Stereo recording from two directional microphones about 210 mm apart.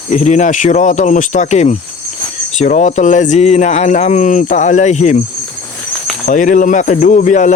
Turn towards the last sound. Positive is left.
turn(degrees=35)  # may be behind; listen again after turning